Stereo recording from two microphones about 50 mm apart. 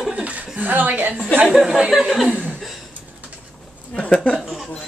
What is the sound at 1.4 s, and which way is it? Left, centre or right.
Speech, centre.